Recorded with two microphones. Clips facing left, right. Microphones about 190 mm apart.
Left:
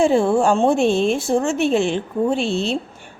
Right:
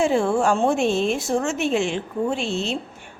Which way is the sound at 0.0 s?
30° left (ahead or behind).